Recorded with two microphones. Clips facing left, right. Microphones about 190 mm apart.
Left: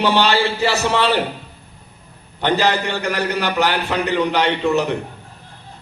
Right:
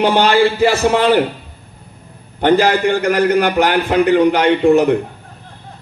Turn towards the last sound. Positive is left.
turn(degrees=-50)  # may be behind; listen again after turning